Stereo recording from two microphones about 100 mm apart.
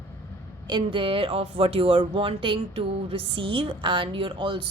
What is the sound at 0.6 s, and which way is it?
Speech, 55° right (ahead or behind).